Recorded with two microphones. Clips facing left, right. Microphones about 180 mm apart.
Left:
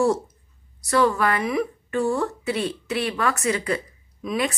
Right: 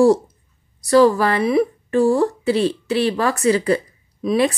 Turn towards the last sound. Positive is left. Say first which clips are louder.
# right 8 dB
turn(degrees=-35)  # may be behind; listen again after turning